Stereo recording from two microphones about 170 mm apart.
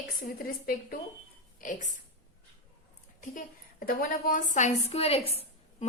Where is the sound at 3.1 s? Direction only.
55° left (ahead or behind).